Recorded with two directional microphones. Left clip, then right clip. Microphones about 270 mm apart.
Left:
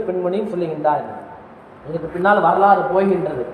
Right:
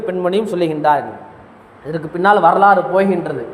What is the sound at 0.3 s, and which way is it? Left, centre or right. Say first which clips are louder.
A man's voice: right 5 dB; right.